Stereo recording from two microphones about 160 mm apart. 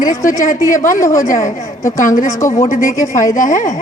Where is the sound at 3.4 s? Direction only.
50° left (ahead or behind).